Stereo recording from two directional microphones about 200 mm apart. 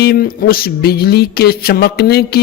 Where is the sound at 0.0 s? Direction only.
50° left (ahead or behind).